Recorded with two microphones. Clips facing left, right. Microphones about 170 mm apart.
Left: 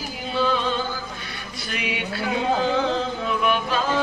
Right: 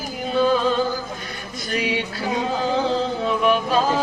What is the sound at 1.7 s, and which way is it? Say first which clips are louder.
Mantra: right 4 dB; 35° right (ahead or behind).